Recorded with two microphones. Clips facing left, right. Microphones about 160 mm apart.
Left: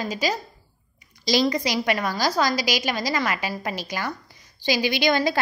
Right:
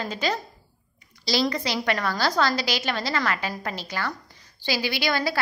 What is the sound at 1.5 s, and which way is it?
A woman's voice, 15° left (ahead or behind).